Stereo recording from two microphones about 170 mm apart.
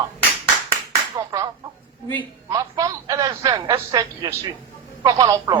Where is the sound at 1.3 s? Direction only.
20° right (ahead or behind).